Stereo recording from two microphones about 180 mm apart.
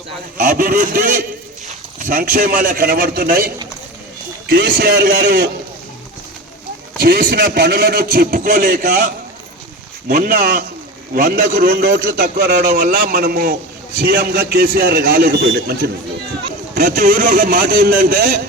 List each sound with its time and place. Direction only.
0.3 s a man's voice: 50° right (ahead or behind)
7.0 s a man's voice: 55° right (ahead or behind)
10.1 s a man's voice: 50° right (ahead or behind)
16.7 s a man's voice: 50° right (ahead or behind)